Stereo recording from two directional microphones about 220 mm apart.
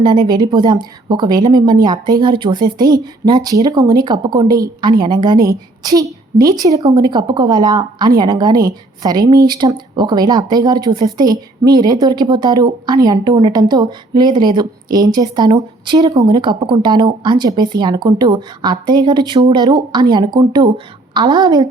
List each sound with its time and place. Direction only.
0.0 s speech: 20° right (ahead or behind)